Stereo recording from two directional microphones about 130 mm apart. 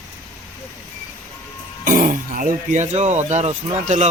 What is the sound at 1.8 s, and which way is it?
A man's voice, 90° right.